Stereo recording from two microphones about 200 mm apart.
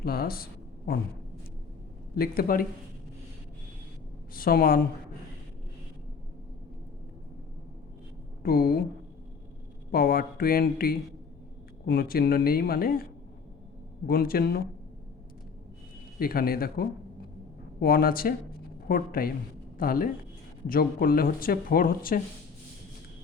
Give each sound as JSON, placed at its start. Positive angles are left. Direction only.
{"t": 0.0, "sound": "a woman's voice", "side_deg": 50}
{"t": 2.1, "sound": "speech", "side_deg": 50}
{"t": 4.4, "sound": "speech", "side_deg": 45}
{"t": 8.4, "sound": "speech", "side_deg": 50}
{"t": 9.9, "sound": "speech", "side_deg": 45}
{"t": 14.1, "sound": "speech", "side_deg": 50}
{"t": 16.1, "sound": "speech", "side_deg": 50}